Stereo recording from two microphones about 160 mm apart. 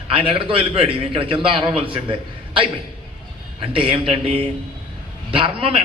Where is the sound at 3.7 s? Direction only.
35° right (ahead or behind).